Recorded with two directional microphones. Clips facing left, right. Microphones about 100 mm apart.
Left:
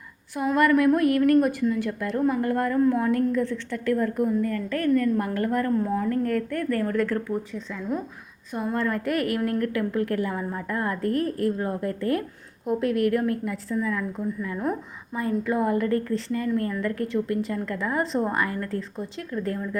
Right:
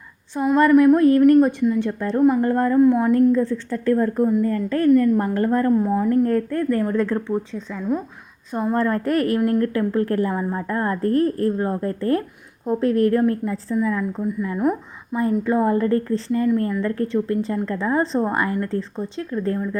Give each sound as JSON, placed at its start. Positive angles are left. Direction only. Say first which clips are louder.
{"t": 0.4, "sound": "a woman's voice", "louder": "right 4 dB", "side_deg": -30}
{"t": 0.7, "sound": "speech", "louder": "right 8 dB", "side_deg": -15}
{"t": 0.9, "sound": "a woman's voice", "louder": "right 6 dB", "side_deg": -30}
{"t": 8.5, "sound": "a woman's voice", "louder": "right 5 dB", "side_deg": -35}